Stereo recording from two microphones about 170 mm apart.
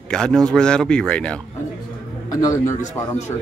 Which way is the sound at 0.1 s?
5° left (ahead or behind).